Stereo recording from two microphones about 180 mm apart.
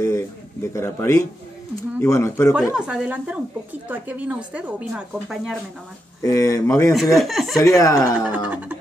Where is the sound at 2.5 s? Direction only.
5° right (ahead or behind).